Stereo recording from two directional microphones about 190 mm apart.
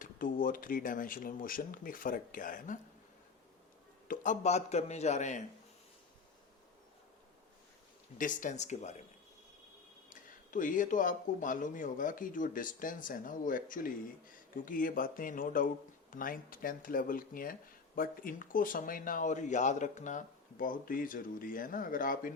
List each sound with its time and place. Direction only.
0.0 s speech: 45° left (ahead or behind)
4.1 s a man's voice: 40° left (ahead or behind)
8.2 s a man's voice: 45° left (ahead or behind)
10.1 s speech: 45° left (ahead or behind)